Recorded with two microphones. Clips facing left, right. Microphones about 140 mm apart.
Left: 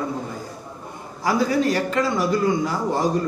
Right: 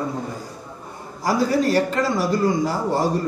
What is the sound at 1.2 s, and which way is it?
A man's voice, 35° right (ahead or behind).